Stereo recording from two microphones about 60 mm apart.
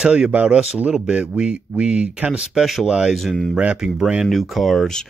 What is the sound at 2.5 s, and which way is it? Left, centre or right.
Speech, centre.